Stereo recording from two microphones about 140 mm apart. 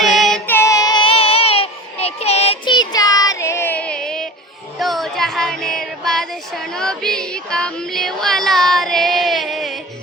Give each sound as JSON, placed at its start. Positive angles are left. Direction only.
{"t": 0.0, "sound": "child singing", "side_deg": 0}
{"t": 0.4, "sound": "child singing", "side_deg": 15}
{"t": 2.6, "sound": "child singing", "side_deg": 30}
{"t": 4.8, "sound": "a sound", "side_deg": 0}